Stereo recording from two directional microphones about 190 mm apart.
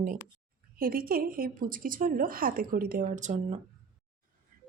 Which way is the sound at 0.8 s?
50° right (ahead or behind).